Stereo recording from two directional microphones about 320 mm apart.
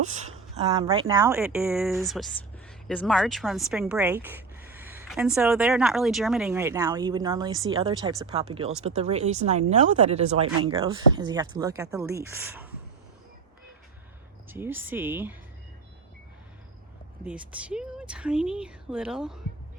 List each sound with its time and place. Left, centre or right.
0.8 s speech: centre
14.5 s speech: centre
17.2 s speech: centre